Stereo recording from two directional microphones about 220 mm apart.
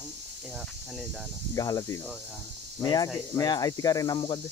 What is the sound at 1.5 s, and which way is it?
Speech, 15° left (ahead or behind).